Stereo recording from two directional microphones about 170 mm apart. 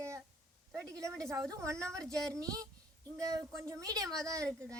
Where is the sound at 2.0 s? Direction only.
5° left (ahead or behind).